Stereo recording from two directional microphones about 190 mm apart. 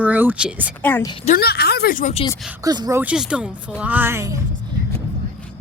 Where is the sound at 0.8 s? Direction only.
10° left (ahead or behind).